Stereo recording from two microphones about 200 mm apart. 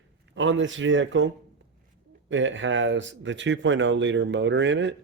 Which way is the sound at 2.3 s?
70° right (ahead or behind).